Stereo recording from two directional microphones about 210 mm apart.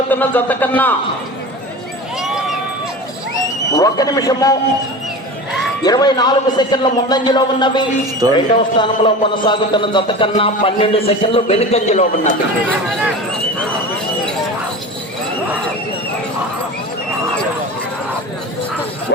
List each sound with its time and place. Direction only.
0.1 s a man's voice: 10° left (ahead or behind)
2.2 s run: centre (ahead or behind)
3.7 s a man's voice: 15° left (ahead or behind)
5.8 s a man's voice: 20° left (ahead or behind)
8.2 s speech: 15° right (ahead or behind)
8.8 s a man's voice: 20° left (ahead or behind)